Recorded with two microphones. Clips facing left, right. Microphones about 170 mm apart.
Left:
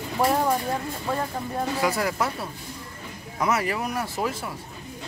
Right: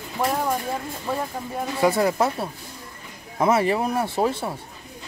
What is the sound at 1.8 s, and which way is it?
Speech, 25° right (ahead or behind).